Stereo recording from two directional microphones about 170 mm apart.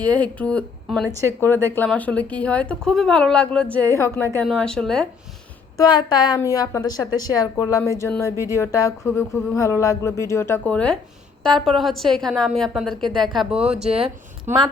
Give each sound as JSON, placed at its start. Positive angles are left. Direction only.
{"t": 0.0, "sound": "a woman's voice", "side_deg": 10}
{"t": 4.4, "sound": "a woman's voice", "side_deg": 5}
{"t": 5.7, "sound": "a woman's voice", "side_deg": 25}